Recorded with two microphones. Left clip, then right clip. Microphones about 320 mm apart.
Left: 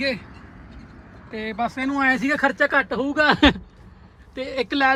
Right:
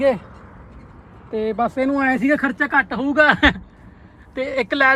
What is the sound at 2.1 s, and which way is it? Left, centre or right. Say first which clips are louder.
A man's voice: right 1 dB; centre.